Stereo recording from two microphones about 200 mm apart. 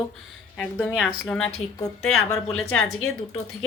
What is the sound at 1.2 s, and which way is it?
A woman's voice, 5° left (ahead or behind).